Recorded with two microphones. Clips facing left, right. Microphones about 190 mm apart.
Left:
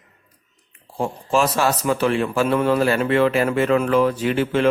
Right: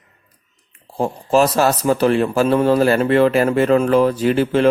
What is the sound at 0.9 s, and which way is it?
Speech, 40° right (ahead or behind).